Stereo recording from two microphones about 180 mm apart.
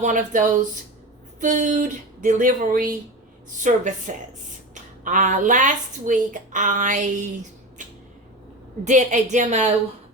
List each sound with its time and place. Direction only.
0.0 s speech: 45° right (ahead or behind)
8.8 s a woman's voice: 40° right (ahead or behind)